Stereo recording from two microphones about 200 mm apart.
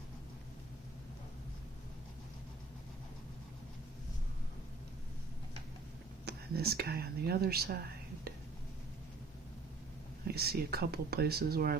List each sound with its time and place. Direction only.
6.2 s speech: 50° right (ahead or behind)
10.2 s speech: 50° right (ahead or behind)